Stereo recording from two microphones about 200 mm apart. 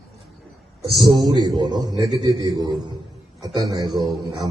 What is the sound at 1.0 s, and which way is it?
A man's voice, 20° right (ahead or behind).